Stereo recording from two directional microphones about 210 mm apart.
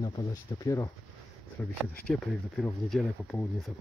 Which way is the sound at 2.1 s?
Centre (ahead or behind).